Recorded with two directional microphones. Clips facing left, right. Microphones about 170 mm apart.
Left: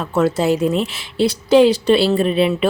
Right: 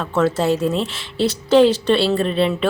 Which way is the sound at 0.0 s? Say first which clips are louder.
Left 1 dB; 10° left (ahead or behind).